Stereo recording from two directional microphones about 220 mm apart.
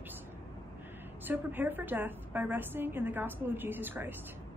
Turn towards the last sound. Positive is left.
turn(degrees=-10)  # may be behind; listen again after turning